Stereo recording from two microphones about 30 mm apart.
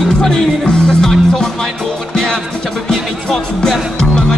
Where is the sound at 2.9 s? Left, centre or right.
Left.